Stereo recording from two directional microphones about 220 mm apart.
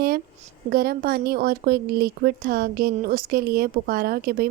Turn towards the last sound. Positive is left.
turn(degrees=-45)  # may be behind; listen again after turning